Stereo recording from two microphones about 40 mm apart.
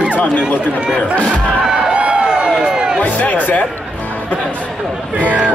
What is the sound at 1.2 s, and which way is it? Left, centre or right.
Speech, centre.